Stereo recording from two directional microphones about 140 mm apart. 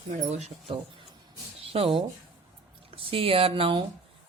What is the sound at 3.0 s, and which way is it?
Speech, 40° right (ahead or behind).